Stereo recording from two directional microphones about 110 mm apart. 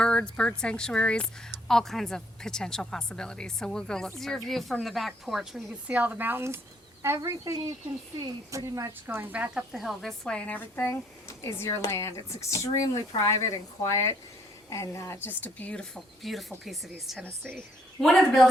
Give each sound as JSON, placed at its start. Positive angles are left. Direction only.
{"t": 0.0, "sound": "speech", "side_deg": 10}
{"t": 5.9, "sound": "speech", "side_deg": -15}
{"t": 9.7, "sound": "speech", "side_deg": 0}
{"t": 11.3, "sound": "speech", "side_deg": 25}